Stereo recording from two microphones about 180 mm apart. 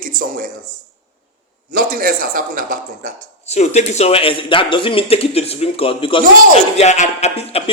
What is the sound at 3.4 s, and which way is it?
A man's voice, 35° left (ahead or behind).